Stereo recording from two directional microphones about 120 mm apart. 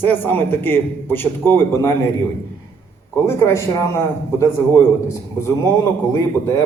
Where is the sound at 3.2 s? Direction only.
25° left (ahead or behind).